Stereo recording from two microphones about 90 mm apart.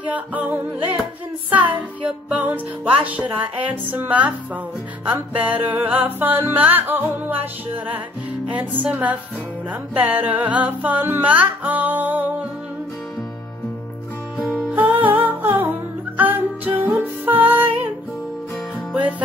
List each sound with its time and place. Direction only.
0.0 s music: 15° right (ahead or behind)
8.5 s music: 15° right (ahead or behind)
14.7 s music: 20° right (ahead or behind)
18.9 s music: 15° right (ahead or behind)